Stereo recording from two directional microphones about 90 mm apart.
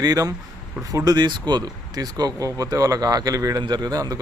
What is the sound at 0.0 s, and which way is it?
Speech, 45° right (ahead or behind).